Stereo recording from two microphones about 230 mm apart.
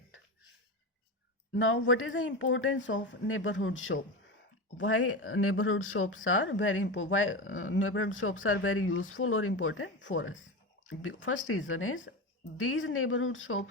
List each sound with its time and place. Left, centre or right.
1.5 s speech: left